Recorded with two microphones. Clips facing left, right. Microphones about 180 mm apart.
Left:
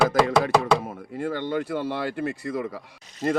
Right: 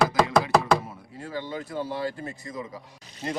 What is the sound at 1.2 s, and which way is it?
Speech, 60° left (ahead or behind).